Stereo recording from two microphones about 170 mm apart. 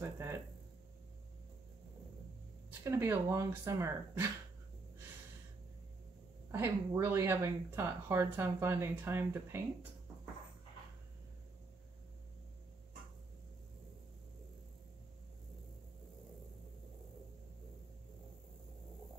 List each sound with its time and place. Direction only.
0.0 s a sound: 15° right (ahead or behind)
2.8 s speech: 15° right (ahead or behind)
6.5 s speech: 15° right (ahead or behind)